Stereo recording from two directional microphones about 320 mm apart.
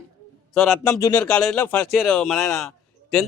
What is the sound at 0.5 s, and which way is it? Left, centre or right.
A man's voice, centre.